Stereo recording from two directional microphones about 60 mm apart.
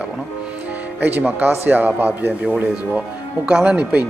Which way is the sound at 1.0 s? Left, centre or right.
Right.